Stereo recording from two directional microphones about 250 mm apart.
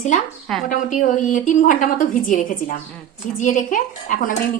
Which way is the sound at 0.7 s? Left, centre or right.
Left.